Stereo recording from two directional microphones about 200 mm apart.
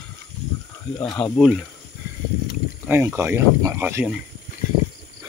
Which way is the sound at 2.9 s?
10° right (ahead or behind).